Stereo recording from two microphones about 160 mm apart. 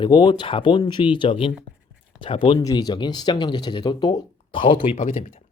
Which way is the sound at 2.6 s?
25° left (ahead or behind).